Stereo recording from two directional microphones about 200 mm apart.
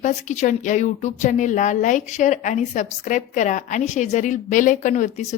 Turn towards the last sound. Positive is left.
turn(degrees=40)  # may be behind; listen again after turning